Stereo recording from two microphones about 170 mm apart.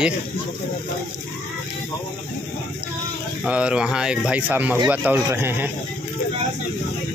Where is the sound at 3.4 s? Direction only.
5° right (ahead or behind).